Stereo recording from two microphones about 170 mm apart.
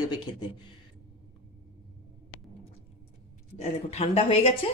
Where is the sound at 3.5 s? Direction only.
40° left (ahead or behind).